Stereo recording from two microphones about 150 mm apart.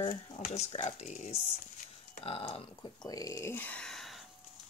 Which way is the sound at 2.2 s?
40° left (ahead or behind).